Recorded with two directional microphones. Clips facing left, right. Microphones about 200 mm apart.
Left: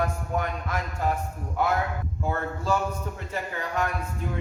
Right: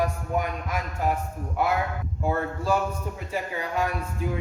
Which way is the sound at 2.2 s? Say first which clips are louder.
Right 3 dB; 15° right (ahead or behind).